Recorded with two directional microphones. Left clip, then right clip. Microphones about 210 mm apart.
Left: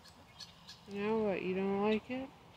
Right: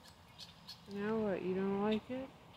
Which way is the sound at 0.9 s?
15° left (ahead or behind).